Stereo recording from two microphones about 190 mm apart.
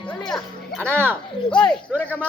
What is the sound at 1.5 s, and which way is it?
Speech, 5° left (ahead or behind).